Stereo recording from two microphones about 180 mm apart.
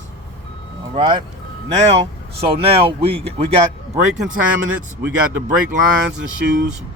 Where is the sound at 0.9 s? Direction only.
25° right (ahead or behind).